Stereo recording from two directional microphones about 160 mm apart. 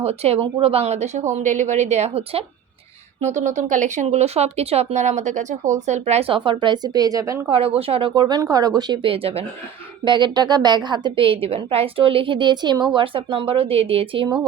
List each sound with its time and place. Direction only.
0.0 s speech: 40° right (ahead or behind); by 7.5 s 20° right (ahead or behind)
7.5 s a woman's voice: 35° right (ahead or behind)